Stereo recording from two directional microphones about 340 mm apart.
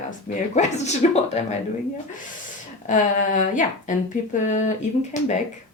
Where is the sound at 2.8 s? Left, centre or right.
Left.